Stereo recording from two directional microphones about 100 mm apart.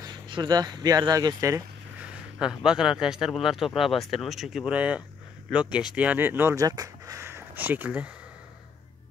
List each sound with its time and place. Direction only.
0.0 s speech: 45° right (ahead or behind)
2.3 s speech: 5° right (ahead or behind)
6.6 s a sound: 40° right (ahead or behind); by 8.1 s 15° right (ahead or behind)